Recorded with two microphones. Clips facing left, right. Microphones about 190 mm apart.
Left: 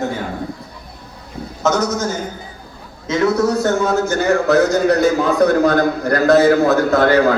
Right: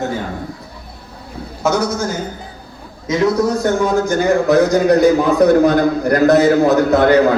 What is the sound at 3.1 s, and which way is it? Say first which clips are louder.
A man's voice: right 1 dB; 15° right (ahead or behind).